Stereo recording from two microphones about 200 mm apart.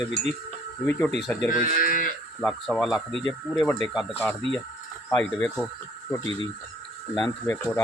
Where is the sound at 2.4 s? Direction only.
Centre (ahead or behind).